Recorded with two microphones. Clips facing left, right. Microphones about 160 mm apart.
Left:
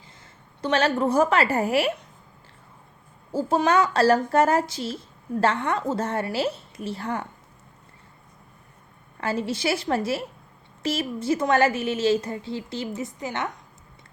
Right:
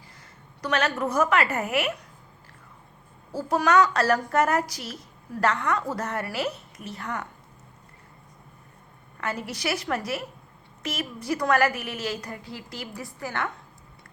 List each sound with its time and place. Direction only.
0.6 s a woman's voice: 30° left (ahead or behind)
3.3 s a woman's voice: 25° left (ahead or behind)
9.2 s a woman's voice: 30° left (ahead or behind)